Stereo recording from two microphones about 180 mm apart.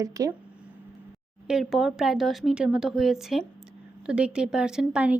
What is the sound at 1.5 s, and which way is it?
A woman's voice, centre (ahead or behind).